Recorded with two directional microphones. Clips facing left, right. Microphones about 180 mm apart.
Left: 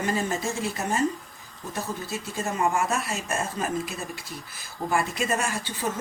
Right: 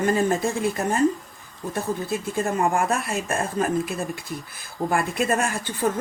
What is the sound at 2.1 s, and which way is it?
Speech, 55° right (ahead or behind).